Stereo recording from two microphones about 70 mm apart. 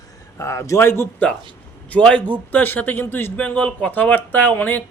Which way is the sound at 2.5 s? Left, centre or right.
Left.